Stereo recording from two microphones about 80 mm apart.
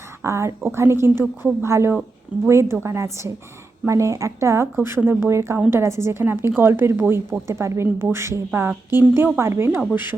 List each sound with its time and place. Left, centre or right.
0.2 s a woman's voice: right